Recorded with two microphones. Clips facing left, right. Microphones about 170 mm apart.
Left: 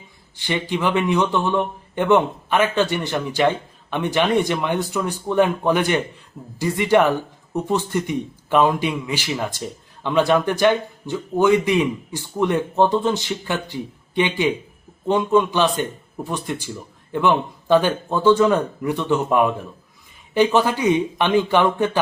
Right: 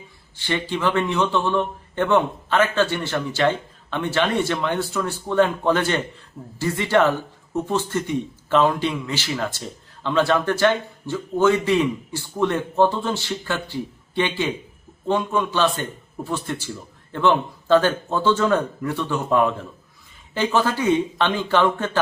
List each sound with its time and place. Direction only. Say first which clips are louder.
0.3 s speech: left 1 dB; 15° left (ahead or behind)